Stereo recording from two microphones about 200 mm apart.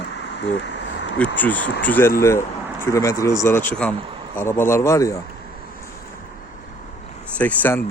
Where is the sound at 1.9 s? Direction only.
10° left (ahead or behind).